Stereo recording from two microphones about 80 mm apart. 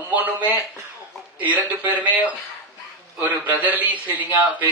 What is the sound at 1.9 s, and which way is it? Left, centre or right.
Speech, centre.